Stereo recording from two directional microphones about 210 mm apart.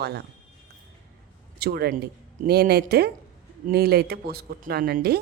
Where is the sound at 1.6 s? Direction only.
50° right (ahead or behind).